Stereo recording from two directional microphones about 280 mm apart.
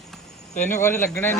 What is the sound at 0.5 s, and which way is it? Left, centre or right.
Speech, left.